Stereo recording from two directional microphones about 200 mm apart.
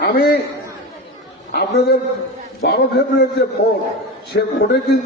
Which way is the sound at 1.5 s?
50° left (ahead or behind).